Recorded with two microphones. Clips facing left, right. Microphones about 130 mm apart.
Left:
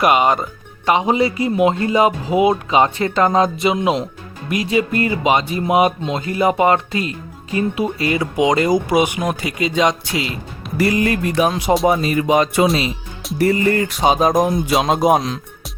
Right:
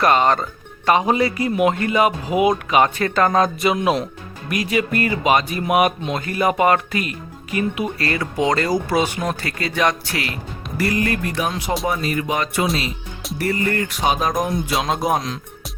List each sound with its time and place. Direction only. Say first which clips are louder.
0.0 s music: left 1 dB; 10° left (ahead or behind)
0.9 s speech: left 1 dB; 20° left (ahead or behind)
10.8 s music: left 4 dB; 15° left (ahead or behind)
11.9 s speech: left 6 dB; 20° left (ahead or behind)